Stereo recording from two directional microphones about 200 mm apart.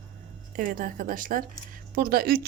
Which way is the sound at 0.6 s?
45° right (ahead or behind).